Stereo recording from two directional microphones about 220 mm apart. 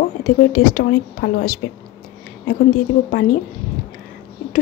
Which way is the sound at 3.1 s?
45° left (ahead or behind).